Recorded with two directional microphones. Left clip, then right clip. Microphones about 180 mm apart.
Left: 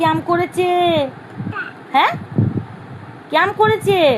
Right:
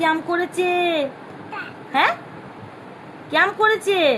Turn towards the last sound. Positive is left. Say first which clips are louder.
# left 4 dB
turn(degrees=30)  # may be behind; listen again after turning